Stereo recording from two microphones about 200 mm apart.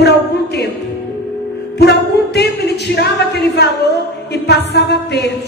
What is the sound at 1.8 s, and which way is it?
Speech, 55° left (ahead or behind).